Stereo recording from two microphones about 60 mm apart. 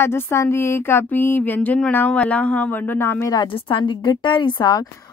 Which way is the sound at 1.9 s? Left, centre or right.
Left.